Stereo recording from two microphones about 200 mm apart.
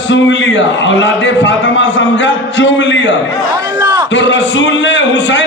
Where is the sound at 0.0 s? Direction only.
65° left (ahead or behind).